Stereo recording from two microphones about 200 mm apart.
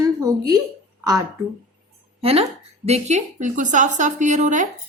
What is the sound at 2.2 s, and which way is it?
Speech, 30° right (ahead or behind).